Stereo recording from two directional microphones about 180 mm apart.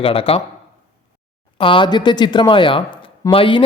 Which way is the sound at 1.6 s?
30° left (ahead or behind).